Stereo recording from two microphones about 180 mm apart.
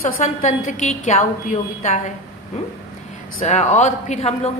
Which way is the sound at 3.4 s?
40° left (ahead or behind).